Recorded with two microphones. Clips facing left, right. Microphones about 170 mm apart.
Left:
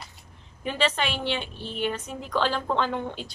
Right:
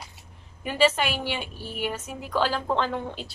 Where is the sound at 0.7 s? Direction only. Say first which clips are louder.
Right 3 dB; 10° right (ahead or behind).